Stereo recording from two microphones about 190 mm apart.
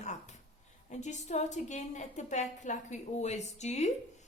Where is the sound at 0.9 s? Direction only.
40° left (ahead or behind).